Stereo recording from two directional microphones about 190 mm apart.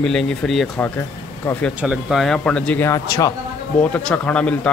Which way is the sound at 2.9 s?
20° left (ahead or behind).